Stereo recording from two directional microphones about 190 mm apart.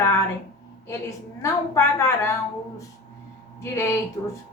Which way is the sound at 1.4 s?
15° left (ahead or behind).